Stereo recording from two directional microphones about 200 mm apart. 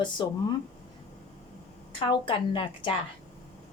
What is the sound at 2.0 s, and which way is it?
Speech, 25° left (ahead or behind).